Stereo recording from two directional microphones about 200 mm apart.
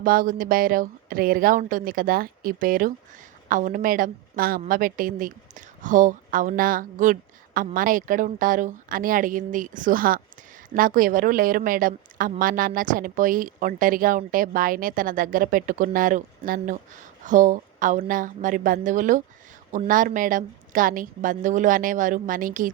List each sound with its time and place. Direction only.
0.0 s a woman's voice: 45° right (ahead or behind)